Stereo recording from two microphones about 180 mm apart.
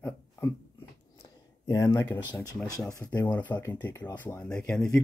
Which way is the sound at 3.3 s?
10° left (ahead or behind).